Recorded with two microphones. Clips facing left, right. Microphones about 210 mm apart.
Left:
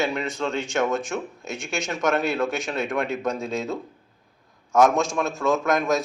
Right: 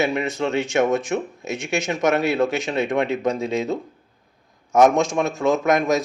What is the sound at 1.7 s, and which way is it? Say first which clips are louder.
Speech: right 4 dB; 20° right (ahead or behind).